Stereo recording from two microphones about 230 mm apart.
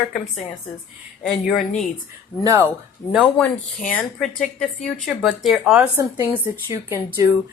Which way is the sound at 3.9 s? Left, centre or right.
Centre.